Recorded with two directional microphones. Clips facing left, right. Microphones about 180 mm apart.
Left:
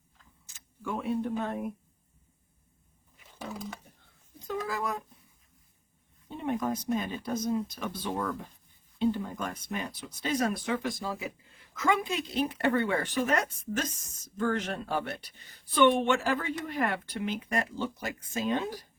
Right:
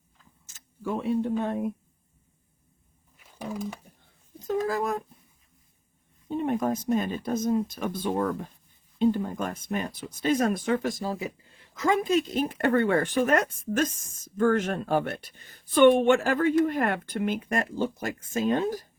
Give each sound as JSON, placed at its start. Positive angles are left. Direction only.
{"t": 0.4, "sound": "a sound", "side_deg": -45}
{"t": 0.9, "sound": "speech", "side_deg": -25}
{"t": 4.4, "sound": "speech", "side_deg": -45}
{"t": 6.2, "sound": "speech", "side_deg": -50}